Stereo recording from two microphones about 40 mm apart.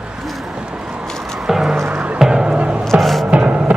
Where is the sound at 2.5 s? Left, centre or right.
Right.